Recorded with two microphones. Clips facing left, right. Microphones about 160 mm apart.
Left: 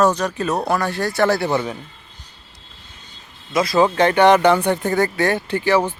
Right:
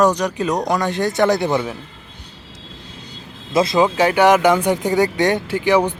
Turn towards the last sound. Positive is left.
turn(degrees=-15)  # may be behind; listen again after turning